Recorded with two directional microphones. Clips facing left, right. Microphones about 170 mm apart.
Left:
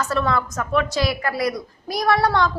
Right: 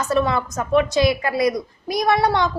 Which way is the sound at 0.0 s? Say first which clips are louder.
Right 2 dB; 20° right (ahead or behind).